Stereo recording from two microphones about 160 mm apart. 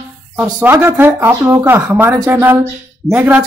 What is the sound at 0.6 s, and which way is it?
Speech, 15° right (ahead or behind).